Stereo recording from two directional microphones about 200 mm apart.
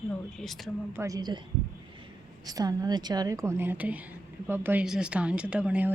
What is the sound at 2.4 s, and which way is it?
A woman's voice, 20° right (ahead or behind).